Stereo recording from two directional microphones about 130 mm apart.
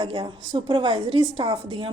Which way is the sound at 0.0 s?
40° right (ahead or behind).